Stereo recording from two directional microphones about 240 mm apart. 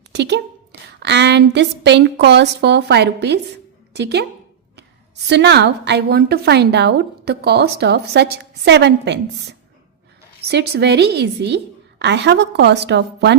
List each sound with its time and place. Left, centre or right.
0.1 s a woman's voice: right
5.3 s a woman's voice: right